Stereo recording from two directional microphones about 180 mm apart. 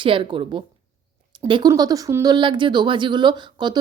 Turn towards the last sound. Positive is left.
turn(degrees=-25)  # may be behind; listen again after turning